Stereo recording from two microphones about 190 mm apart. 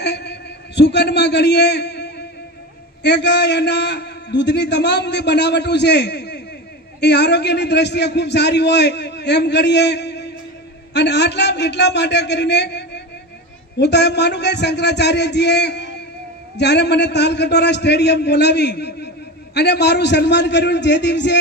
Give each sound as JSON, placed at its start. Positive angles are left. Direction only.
{"t": 0.0, "sound": "a man's voice", "side_deg": 65}